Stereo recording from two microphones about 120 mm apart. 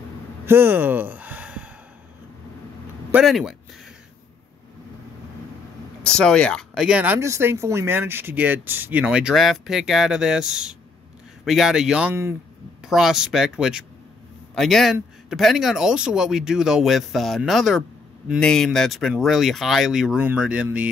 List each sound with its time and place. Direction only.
0.5 s a sound: 15° right (ahead or behind)
3.3 s speech: centre (ahead or behind)
6.0 s speech: 5° left (ahead or behind)
6.8 s speech: 10° right (ahead or behind)
7.2 s speech: 25° right (ahead or behind)